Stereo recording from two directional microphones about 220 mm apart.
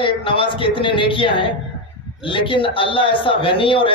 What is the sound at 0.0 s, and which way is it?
Speech, 25° left (ahead or behind).